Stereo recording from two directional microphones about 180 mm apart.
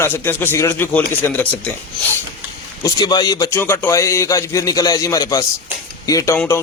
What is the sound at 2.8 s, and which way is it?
A man's voice, 20° left (ahead or behind).